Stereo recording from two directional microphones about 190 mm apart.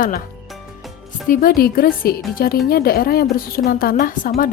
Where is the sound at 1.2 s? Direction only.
50° left (ahead or behind).